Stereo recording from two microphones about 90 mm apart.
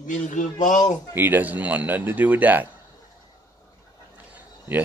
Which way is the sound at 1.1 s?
20° right (ahead or behind).